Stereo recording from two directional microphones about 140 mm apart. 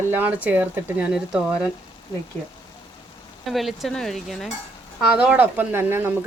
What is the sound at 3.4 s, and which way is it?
Speech, centre (ahead or behind).